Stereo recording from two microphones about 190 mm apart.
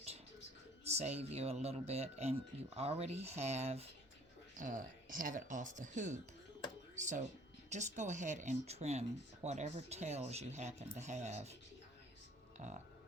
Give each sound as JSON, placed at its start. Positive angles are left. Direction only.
{"t": 0.9, "sound": "speech", "side_deg": -35}
{"t": 12.6, "sound": "speech", "side_deg": -35}